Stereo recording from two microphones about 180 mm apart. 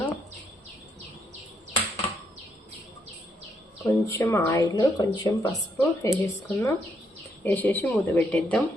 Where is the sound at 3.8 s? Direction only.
10° left (ahead or behind).